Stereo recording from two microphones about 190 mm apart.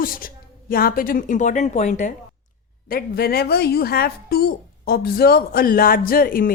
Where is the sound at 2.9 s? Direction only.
50° left (ahead or behind).